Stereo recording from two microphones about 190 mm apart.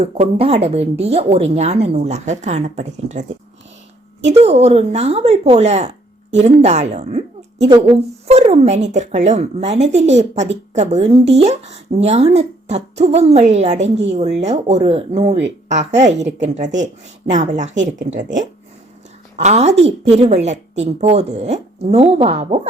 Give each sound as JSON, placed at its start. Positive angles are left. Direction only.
{"t": 0.0, "sound": "speech", "side_deg": -30}
{"t": 4.4, "sound": "speech", "side_deg": -35}
{"t": 16.1, "sound": "speech", "side_deg": -65}
{"t": 16.6, "sound": "speech", "side_deg": -40}